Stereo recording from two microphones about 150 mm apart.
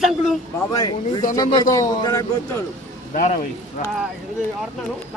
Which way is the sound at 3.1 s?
60° left (ahead or behind).